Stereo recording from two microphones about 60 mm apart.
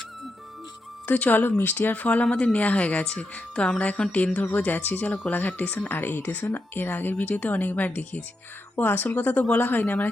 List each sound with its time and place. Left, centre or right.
1.0 s speech: left